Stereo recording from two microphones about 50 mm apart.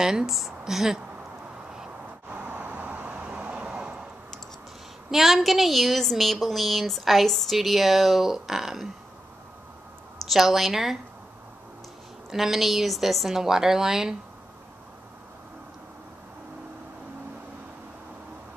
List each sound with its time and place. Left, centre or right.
0.0 s a woman's voice: centre
2.4 s vehicle: right
3.3 s vehicle: right
5.1 s a woman's voice: centre
10.2 s a woman's voice: centre
12.3 s a woman's voice: centre